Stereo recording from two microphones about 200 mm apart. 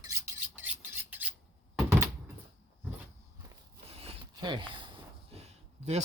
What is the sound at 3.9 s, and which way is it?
Zipper, 30° right (ahead or behind).